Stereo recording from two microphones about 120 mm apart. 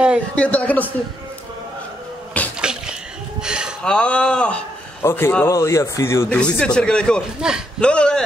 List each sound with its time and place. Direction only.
0.4 s speech: 10° left (ahead or behind)
2.6 s a sound: 5° right (ahead or behind)
3.8 s speech: 10° left (ahead or behind); by 6.2 s 25° left (ahead or behind)
6.2 s speech: 10° left (ahead or behind)
7.3 s a man's voice: 5° right (ahead or behind)
7.8 s speech: 10° left (ahead or behind)